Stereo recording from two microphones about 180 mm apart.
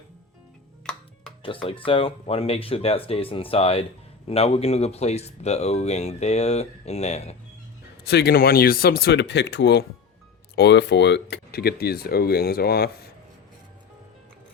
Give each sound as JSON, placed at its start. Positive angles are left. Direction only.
{"t": 1.6, "sound": "speech", "side_deg": 30}
{"t": 8.0, "sound": "speech", "side_deg": 60}